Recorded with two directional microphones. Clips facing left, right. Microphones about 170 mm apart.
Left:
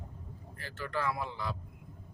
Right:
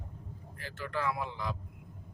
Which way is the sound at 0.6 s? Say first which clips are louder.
Even; 15° right (ahead or behind).